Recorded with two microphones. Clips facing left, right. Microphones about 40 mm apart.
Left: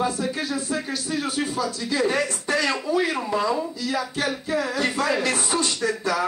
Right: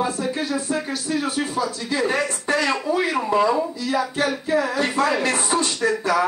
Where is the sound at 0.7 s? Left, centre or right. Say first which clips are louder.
Right 2 dB; right.